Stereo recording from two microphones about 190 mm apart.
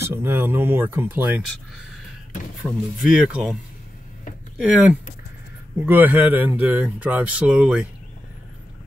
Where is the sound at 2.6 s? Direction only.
5° right (ahead or behind).